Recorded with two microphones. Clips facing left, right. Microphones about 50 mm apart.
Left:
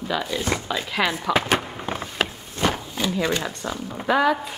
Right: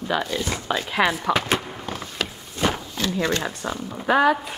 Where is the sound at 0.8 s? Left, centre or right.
Centre.